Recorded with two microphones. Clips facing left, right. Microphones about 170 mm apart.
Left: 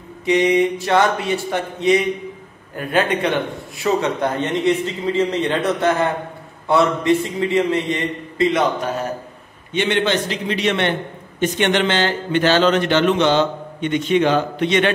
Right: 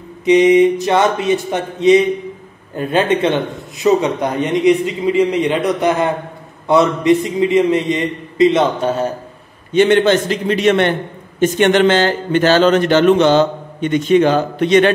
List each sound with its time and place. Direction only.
0.2 s a man's voice: 20° right (ahead or behind)
9.7 s speech: 45° right (ahead or behind)